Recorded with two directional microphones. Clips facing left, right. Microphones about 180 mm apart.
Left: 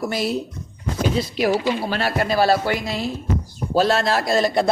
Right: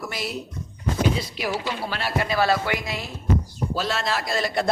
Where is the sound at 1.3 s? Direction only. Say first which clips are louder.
Left 8 dB; 40° left (ahead or behind).